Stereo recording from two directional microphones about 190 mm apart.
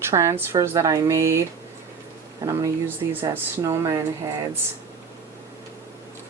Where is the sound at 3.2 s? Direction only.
25° right (ahead or behind).